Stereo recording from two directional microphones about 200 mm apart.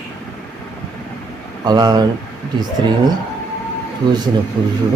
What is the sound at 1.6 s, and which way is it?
Speech, 20° right (ahead or behind).